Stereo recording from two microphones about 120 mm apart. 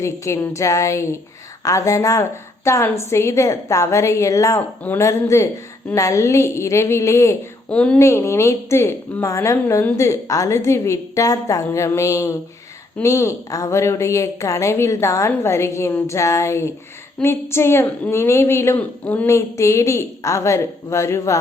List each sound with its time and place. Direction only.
0.0 s a woman's voice: 20° left (ahead or behind)
4.8 s speech: 15° left (ahead or behind)
5.0 s a woman's voice: 25° left (ahead or behind)
7.7 s speech: 10° left (ahead or behind)
8.0 s a woman's voice: 25° left (ahead or behind)
19.3 s a woman's voice: 25° left (ahead or behind)